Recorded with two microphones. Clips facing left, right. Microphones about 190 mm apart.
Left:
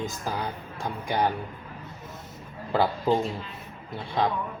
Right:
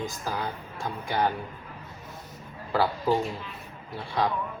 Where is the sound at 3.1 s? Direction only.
20° left (ahead or behind).